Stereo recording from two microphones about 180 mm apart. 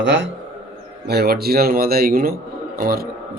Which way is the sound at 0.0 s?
90° right.